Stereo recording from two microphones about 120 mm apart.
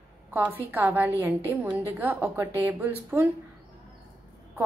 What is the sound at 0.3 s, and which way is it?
A woman's voice, 15° right (ahead or behind).